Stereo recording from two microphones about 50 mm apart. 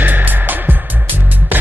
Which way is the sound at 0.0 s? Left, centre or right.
Right.